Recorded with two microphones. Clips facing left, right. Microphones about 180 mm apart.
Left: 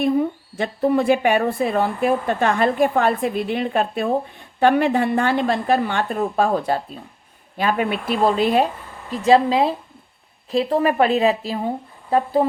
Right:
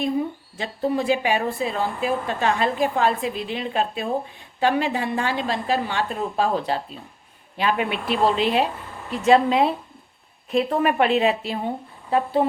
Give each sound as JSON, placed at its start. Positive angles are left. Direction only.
{"t": 0.0, "sound": "a woman's voice", "side_deg": 55}